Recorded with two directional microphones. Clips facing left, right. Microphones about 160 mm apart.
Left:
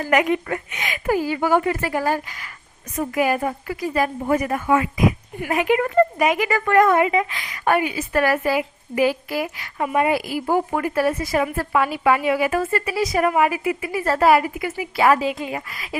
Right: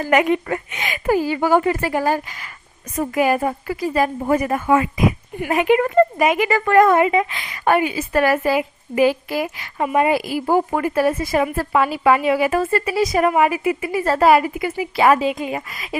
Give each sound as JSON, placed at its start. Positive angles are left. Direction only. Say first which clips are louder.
{"t": 0.1, "sound": "speech", "louder": "right 2 dB", "side_deg": -30}